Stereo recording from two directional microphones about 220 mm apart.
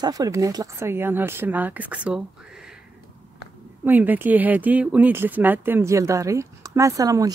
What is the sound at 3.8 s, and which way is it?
Speech, 10° right (ahead or behind).